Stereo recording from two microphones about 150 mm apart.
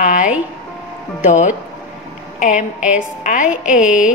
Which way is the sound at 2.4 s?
55° left (ahead or behind).